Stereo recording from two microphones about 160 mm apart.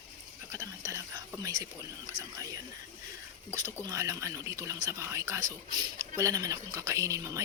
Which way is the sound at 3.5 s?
20° right (ahead or behind).